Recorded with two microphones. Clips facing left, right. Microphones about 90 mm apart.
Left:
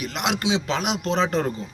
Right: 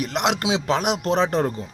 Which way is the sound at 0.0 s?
55° right (ahead or behind).